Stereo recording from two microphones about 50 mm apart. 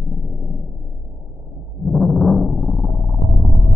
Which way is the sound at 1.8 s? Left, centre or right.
Centre.